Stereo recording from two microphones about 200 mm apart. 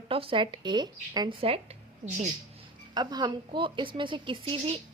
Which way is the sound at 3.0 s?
20° right (ahead or behind).